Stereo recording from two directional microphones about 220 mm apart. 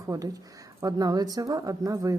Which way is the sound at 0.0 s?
15° right (ahead or behind).